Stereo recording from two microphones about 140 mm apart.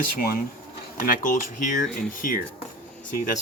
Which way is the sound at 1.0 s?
70° left (ahead or behind).